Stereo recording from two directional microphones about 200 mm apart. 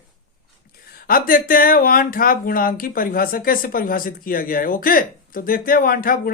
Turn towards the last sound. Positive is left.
turn(degrees=45)  # may be behind; listen again after turning